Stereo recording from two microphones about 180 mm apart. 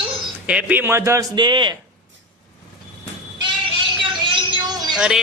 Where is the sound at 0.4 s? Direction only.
10° right (ahead or behind); by 1.7 s 25° right (ahead or behind).